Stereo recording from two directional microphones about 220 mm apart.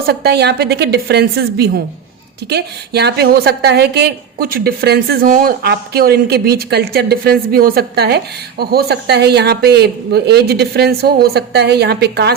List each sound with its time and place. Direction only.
0.0 s a woman's voice: 45° right (ahead or behind)